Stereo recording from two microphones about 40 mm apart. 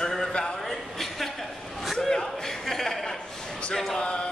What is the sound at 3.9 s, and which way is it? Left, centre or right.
Speech, left.